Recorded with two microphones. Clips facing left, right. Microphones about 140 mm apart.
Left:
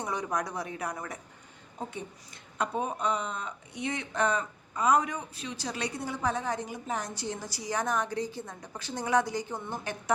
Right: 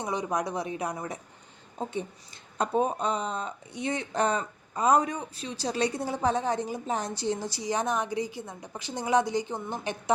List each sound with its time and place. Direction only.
0.0 s speech: 15° right (ahead or behind)
2.6 s speech: 35° right (ahead or behind)